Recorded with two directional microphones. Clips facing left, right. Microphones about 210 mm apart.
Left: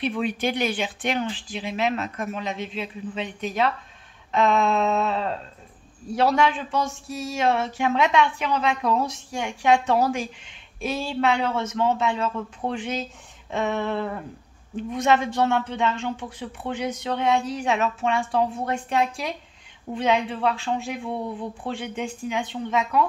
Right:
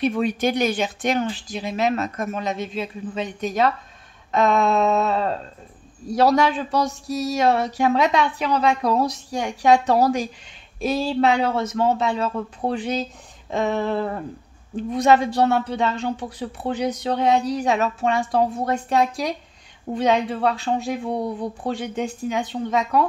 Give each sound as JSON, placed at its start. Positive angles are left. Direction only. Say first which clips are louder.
{"t": 0.0, "sound": "speech", "louder": "right 4 dB", "side_deg": -45}